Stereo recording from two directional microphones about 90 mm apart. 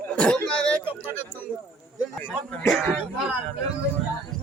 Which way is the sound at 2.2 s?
15° left (ahead or behind).